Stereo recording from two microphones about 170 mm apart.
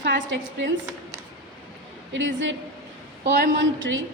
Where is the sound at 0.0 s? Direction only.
90° right.